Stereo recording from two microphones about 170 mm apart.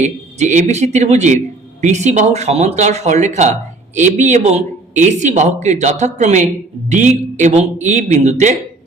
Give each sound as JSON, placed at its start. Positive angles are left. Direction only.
{"t": 0.0, "sound": "speech", "side_deg": -45}